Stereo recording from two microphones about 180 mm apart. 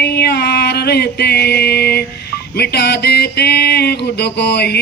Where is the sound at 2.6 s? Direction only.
65° left (ahead or behind).